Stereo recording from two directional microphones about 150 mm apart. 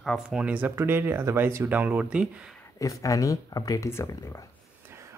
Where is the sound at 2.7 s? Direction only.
20° left (ahead or behind).